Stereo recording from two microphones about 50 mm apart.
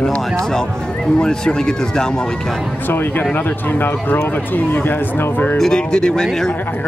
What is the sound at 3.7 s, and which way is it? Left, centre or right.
Speech, left.